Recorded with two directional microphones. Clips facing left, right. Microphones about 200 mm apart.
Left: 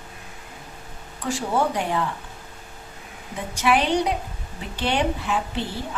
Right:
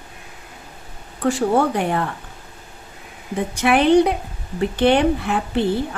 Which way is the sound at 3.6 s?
55° right (ahead or behind).